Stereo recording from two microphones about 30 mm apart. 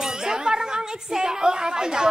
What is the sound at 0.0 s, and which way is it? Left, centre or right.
A woman's voice, centre.